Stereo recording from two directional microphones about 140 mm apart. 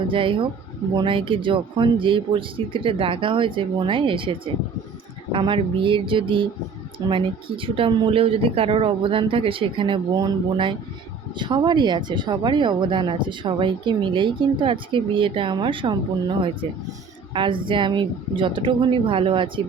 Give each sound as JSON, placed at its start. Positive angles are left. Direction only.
{"t": 0.1, "sound": "speech", "side_deg": -40}
{"t": 17.3, "sound": "speech", "side_deg": -35}